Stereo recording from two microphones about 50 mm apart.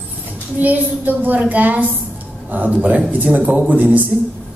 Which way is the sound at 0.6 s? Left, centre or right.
Right.